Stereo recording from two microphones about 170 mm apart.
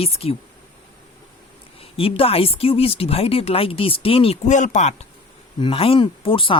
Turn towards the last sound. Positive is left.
turn(degrees=30)  # may be behind; listen again after turning